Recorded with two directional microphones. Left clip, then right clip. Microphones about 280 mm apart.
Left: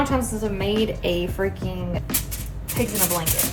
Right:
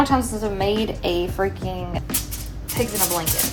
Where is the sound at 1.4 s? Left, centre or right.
Centre.